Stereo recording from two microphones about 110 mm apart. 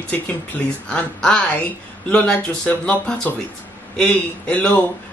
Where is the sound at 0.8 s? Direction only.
10° left (ahead or behind).